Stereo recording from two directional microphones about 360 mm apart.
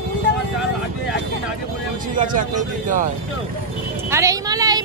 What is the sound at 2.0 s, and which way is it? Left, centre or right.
Speech, right.